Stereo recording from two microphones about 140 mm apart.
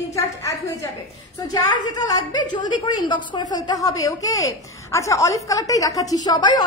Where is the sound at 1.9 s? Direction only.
25° left (ahead or behind).